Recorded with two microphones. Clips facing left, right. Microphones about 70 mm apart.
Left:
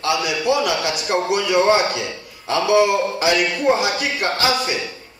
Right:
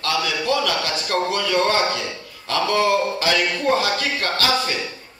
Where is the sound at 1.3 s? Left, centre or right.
Centre.